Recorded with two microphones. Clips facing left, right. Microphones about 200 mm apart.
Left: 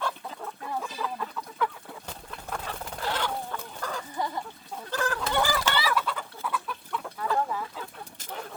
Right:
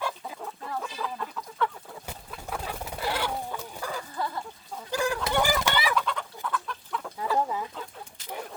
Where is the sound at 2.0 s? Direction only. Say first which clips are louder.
Right 1 dB; 10° right (ahead or behind).